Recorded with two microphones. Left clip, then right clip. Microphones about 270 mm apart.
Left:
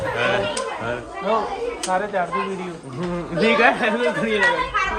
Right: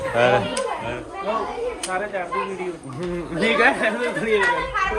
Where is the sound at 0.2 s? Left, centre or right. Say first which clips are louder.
Right 4 dB; centre.